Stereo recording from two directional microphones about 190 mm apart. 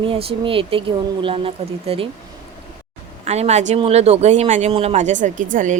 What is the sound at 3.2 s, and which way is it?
Speech, 35° right (ahead or behind).